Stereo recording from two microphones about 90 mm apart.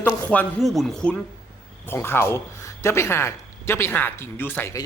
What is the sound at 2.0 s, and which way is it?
A man's voice, 25° left (ahead or behind).